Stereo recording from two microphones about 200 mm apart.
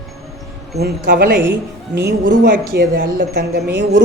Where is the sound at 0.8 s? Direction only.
50° right (ahead or behind).